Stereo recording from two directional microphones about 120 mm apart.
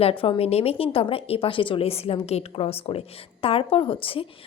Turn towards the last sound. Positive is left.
turn(degrees=50)  # may be behind; listen again after turning